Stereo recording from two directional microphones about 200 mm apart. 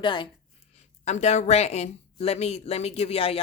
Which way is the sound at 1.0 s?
35° left (ahead or behind).